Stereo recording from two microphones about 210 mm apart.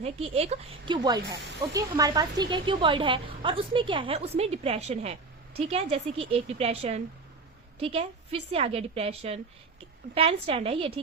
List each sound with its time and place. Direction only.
0.0 s speech: 30° right (ahead or behind)